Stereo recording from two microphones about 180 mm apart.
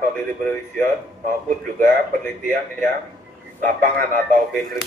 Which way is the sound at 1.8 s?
50° right (ahead or behind).